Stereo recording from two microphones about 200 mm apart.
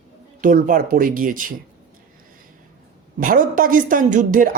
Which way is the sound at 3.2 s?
45° right (ahead or behind).